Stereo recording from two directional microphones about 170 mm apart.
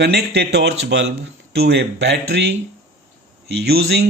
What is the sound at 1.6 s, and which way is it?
Speech, 75° right (ahead or behind).